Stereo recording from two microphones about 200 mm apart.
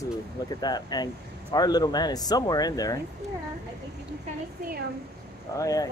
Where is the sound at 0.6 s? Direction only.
20° left (ahead or behind).